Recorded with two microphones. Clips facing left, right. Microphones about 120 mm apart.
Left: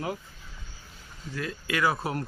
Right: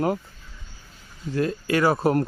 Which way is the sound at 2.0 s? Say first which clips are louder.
Right 11 dB; 50° right (ahead or behind).